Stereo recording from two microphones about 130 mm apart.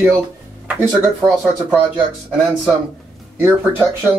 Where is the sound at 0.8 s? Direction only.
15° right (ahead or behind).